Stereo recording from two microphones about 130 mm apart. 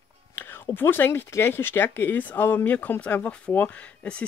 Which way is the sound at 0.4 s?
15° left (ahead or behind).